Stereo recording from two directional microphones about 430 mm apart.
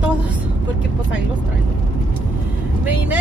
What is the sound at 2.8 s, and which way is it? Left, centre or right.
Speech, centre.